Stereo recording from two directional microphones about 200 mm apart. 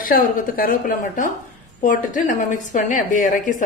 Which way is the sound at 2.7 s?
40° left (ahead or behind).